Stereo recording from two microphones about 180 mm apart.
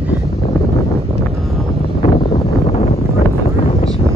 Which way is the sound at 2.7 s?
35° left (ahead or behind).